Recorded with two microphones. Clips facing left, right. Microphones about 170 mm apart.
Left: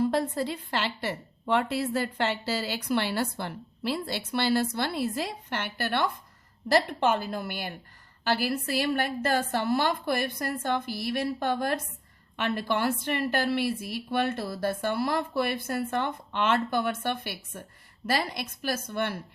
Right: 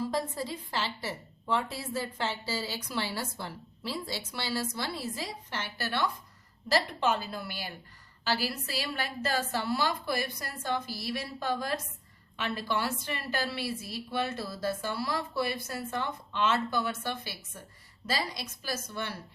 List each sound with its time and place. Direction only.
0.0 s a woman's voice: 65° left (ahead or behind)